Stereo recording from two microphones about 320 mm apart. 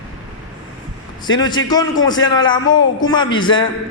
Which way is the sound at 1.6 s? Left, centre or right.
Centre.